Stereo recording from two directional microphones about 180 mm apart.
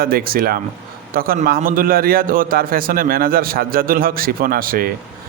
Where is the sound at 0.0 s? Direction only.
55° right (ahead or behind).